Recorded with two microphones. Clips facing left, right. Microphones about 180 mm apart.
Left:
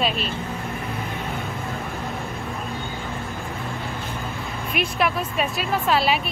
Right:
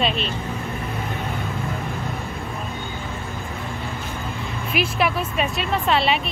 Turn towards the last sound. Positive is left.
turn(degrees=0)  # may be behind; listen again after turning